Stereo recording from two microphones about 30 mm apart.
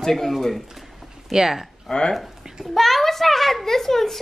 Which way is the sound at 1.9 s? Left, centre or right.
Left.